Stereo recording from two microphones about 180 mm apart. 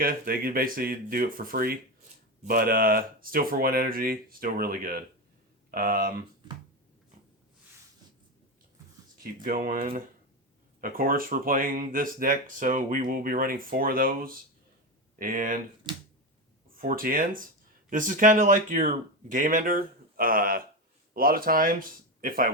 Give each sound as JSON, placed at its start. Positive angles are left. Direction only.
{"t": 0.0, "sound": "speech", "side_deg": -55}
{"t": 9.2, "sound": "speech", "side_deg": -50}
{"t": 10.8, "sound": "speech", "side_deg": -50}
{"t": 15.9, "sound": "finger snapping", "side_deg": -25}
{"t": 16.7, "sound": "speech", "side_deg": -50}